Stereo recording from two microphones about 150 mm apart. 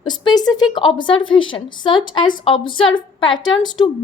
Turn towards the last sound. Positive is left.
turn(degrees=30)  # may be behind; listen again after turning